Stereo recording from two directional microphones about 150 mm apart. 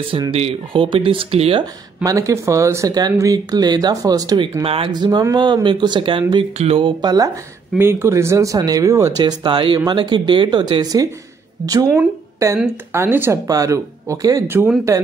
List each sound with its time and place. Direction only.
0.3 s speech: 40° right (ahead or behind)
2.0 s speech: 20° right (ahead or behind)
4.6 s speech: 40° right (ahead or behind)
7.0 s speech: 25° right (ahead or behind)
7.7 s speech: 15° right (ahead or behind)
9.2 s speech: 30° right (ahead or behind)